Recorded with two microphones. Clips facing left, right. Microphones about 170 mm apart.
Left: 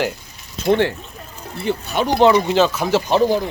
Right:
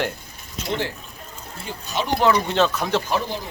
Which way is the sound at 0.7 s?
65° left (ahead or behind).